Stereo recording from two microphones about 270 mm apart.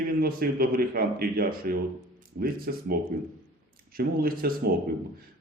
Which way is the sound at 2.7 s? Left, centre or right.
Right.